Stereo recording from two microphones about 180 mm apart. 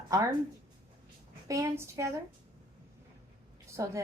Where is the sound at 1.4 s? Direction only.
15° right (ahead or behind).